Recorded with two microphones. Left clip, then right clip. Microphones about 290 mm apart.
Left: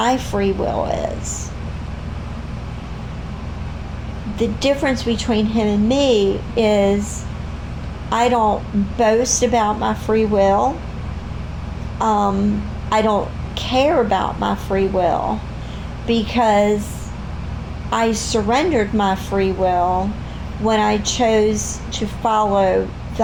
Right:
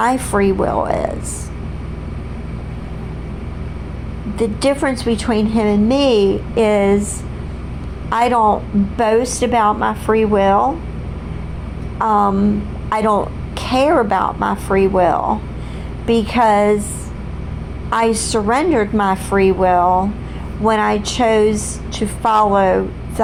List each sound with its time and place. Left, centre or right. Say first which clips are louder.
0.0 s a woman's voice: right 3 dB; right
4.4 s a woman's voice: right 2 dB; right
8.1 s a woman's voice: right 2 dB; right
11.9 s a woman's voice: right 3 dB; right
17.9 s a woman's voice: right 2 dB; right